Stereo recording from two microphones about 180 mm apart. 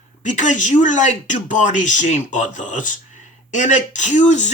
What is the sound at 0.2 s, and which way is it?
Speech, 45° left (ahead or behind).